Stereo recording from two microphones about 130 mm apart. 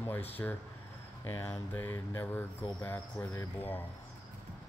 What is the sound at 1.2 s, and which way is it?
Speech, 15° left (ahead or behind).